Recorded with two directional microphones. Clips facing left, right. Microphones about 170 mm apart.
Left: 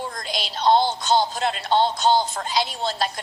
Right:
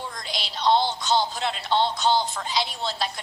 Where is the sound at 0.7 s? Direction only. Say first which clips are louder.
Left 3 dB; 45° left (ahead or behind).